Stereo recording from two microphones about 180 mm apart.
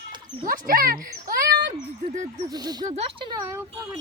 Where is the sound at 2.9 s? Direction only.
35° right (ahead or behind).